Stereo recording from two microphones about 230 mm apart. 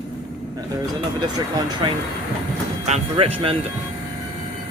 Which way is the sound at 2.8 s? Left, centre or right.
Right.